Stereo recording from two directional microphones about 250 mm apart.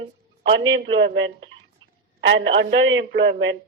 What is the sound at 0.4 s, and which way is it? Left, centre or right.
Speech, right.